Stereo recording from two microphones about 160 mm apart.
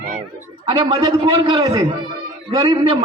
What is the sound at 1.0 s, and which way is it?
A man's voice, 30° right (ahead or behind).